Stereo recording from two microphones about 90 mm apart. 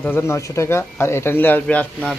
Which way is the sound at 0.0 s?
25° left (ahead or behind).